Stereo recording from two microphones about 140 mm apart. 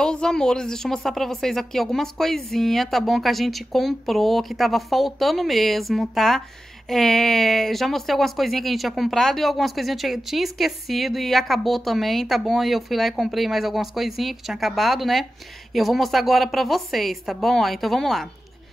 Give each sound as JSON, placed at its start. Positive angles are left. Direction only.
{"t": 0.0, "sound": "speech", "side_deg": 5}